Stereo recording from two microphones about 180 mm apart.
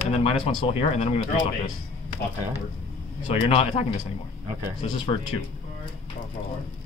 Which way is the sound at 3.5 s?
35° left (ahead or behind).